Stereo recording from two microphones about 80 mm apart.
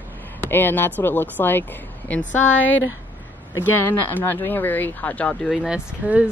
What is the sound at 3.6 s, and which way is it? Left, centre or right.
Speech, left.